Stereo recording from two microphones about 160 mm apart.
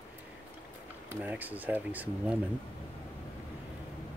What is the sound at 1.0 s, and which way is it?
Speech, 10° right (ahead or behind).